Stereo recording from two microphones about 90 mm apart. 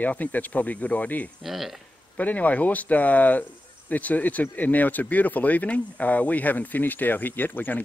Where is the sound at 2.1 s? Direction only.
15° left (ahead or behind).